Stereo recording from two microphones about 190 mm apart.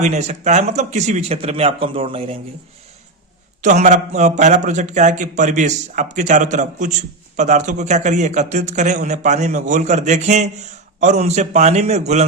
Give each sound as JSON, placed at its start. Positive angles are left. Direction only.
{"t": 0.0, "sound": "a man's voice", "side_deg": -35}
{"t": 3.6, "sound": "a man's voice", "side_deg": -40}